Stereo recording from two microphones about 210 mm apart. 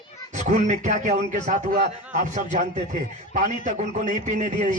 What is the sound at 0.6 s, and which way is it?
A man's voice, 35° right (ahead or behind).